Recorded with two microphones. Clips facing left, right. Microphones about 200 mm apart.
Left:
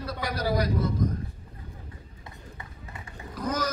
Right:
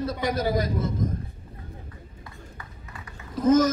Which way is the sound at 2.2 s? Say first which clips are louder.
Even; 25° left (ahead or behind).